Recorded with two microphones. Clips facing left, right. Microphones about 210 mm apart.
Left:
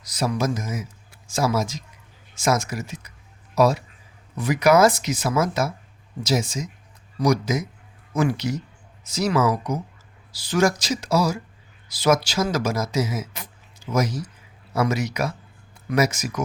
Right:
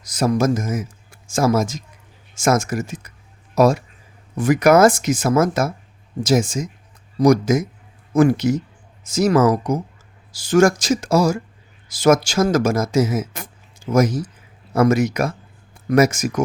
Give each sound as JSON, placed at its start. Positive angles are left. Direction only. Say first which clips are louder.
{"t": 0.0, "sound": "speech", "louder": "right 6 dB", "side_deg": -45}